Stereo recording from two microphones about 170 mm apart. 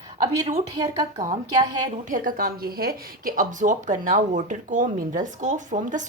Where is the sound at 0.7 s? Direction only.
25° right (ahead or behind).